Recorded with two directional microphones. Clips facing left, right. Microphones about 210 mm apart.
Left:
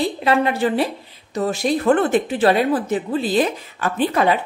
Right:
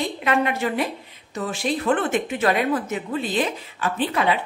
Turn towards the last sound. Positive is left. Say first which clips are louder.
# left 4 dB
turn(degrees=45)  # may be behind; listen again after turning